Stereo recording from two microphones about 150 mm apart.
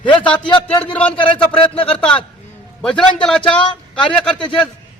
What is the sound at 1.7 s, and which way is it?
Speech, 40° left (ahead or behind).